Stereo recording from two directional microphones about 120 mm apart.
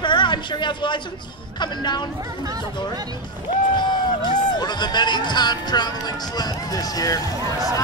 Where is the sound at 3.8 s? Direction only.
40° left (ahead or behind).